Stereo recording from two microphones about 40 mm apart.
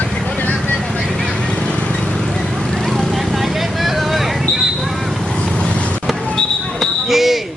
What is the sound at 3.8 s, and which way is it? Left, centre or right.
Vehicle, centre.